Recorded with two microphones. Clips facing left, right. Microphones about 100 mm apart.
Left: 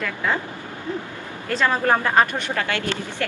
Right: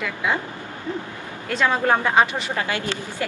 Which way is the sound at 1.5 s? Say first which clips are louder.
Even; centre (ahead or behind).